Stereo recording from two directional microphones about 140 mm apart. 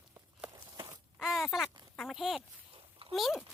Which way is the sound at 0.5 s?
25° right (ahead or behind).